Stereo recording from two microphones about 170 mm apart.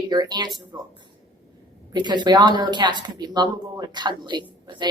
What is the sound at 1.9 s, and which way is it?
A woman's voice, 25° right (ahead or behind).